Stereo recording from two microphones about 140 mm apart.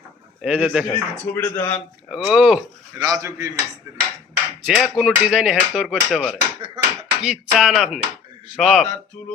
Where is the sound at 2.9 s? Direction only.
25° right (ahead or behind).